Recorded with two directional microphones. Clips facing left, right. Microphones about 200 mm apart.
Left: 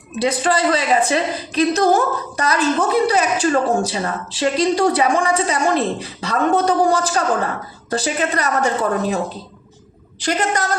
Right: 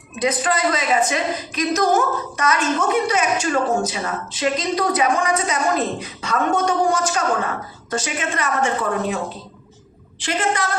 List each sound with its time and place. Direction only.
0.2 s a woman's voice: 30° left (ahead or behind)